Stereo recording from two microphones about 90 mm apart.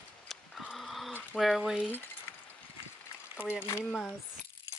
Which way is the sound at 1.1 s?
20° left (ahead or behind).